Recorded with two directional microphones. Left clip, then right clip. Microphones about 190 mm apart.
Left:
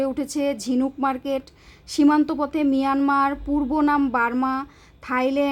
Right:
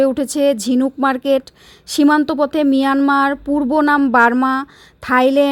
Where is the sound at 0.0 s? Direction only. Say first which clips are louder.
Right 9 dB; 35° right (ahead or behind).